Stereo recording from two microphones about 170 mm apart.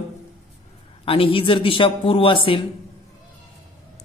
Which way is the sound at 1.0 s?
30° left (ahead or behind).